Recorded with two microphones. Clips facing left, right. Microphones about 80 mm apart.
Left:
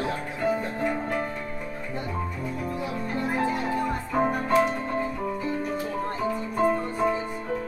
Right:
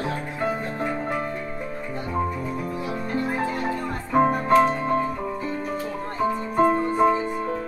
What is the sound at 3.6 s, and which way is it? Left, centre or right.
Music, right.